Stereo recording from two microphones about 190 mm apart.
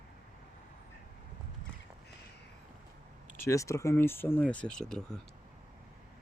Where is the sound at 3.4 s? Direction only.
15° left (ahead or behind).